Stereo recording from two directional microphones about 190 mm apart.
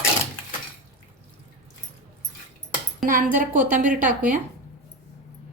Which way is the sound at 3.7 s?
45° right (ahead or behind).